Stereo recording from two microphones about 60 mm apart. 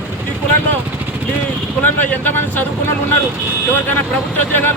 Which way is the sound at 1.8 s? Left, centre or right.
Left.